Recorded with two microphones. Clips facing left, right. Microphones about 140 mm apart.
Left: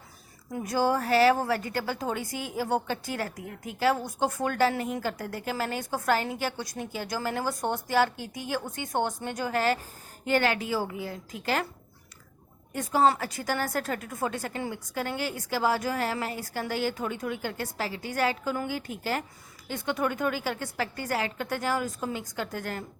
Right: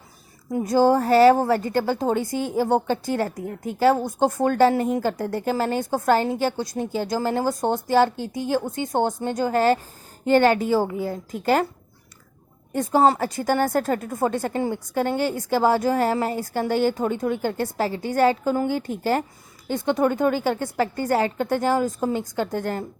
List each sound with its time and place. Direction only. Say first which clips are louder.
0.5 s a woman's voice: right 9 dB; 25° right (ahead or behind)
0.8 s a woman's voice: right 7 dB; 40° right (ahead or behind)
7.6 s a woman's voice: right 7 dB; 20° right (ahead or behind)
8.1 s a woman's voice: right 9 dB; 15° left (ahead or behind)
8.4 s speech: right 8 dB; 40° right (ahead or behind)
8.7 s a woman's voice: right 8 dB; 20° right (ahead or behind)
9.2 s a woman's voice: right 7 dB; 40° right (ahead or behind)
12.7 s a woman's voice: right 5 dB; 40° right (ahead or behind)